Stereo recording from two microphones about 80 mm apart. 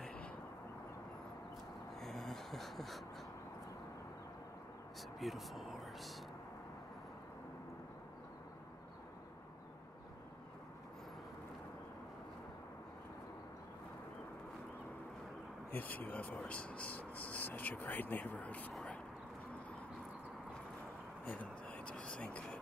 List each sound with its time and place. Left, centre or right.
2.0 s gasp: centre
5.2 s speech: centre
15.7 s speech: left
21.3 s speech: centre